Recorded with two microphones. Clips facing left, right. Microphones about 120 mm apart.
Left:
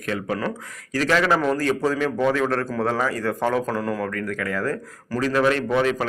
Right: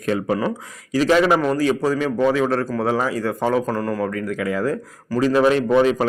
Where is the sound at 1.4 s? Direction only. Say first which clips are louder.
Right 2 dB; 5° right (ahead or behind).